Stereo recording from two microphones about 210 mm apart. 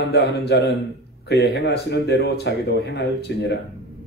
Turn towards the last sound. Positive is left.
turn(degrees=50)  # may be behind; listen again after turning